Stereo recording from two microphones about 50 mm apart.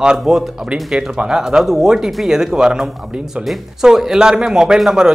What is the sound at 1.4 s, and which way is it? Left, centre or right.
A man's voice, centre.